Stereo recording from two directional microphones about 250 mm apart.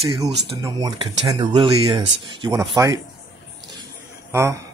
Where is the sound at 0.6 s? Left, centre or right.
Centre.